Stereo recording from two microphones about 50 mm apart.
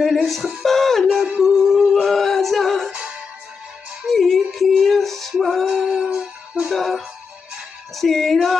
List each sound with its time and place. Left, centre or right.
0.0 s a sound: centre
2.9 s music: right
4.0 s music: centre
5.9 s music: centre
6.7 s music: centre